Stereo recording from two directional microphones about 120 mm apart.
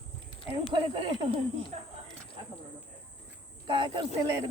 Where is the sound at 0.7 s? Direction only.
40° right (ahead or behind).